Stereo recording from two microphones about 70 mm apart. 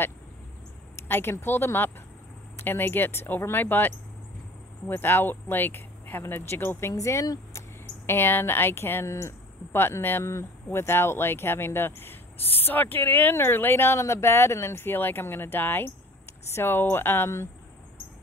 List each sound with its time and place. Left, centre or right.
1.0 s a sound: left
1.3 s speech: left
6.9 s speech: left
8.1 s speech: left